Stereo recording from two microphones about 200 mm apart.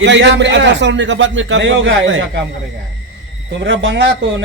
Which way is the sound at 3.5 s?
65° right (ahead or behind).